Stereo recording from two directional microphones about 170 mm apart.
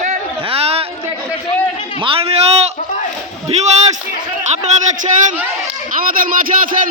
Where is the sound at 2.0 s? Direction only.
35° right (ahead or behind).